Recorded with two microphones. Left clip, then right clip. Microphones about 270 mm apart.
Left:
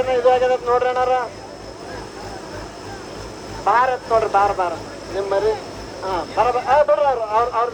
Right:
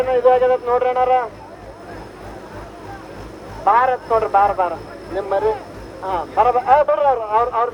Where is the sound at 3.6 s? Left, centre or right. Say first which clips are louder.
Right 2 dB; right.